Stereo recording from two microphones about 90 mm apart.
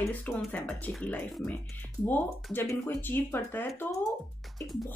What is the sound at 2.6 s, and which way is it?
Speech, 25° left (ahead or behind).